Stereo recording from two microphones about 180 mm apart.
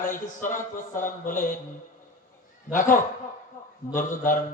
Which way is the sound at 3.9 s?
50° left (ahead or behind).